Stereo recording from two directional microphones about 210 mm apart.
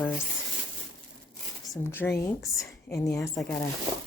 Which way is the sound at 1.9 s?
5° left (ahead or behind).